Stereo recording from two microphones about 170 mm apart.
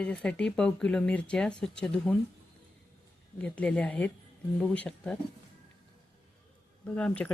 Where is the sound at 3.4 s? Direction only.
5° left (ahead or behind).